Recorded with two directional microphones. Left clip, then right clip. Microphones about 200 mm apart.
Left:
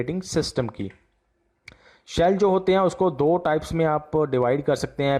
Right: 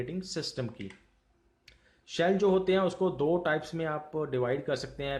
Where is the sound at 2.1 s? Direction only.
40° left (ahead or behind).